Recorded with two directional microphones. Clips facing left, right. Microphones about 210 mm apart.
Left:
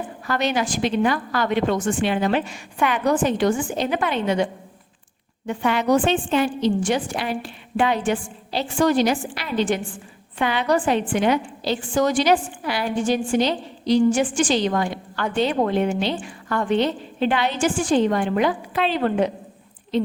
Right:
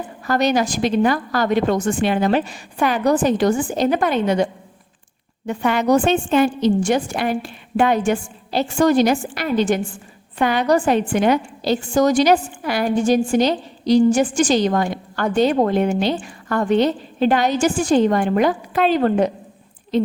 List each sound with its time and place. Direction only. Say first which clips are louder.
0.3 s a woman's voice: right 5 dB; 40° right (ahead or behind)
5.5 s a woman's voice: right 3 dB; 45° right (ahead or behind)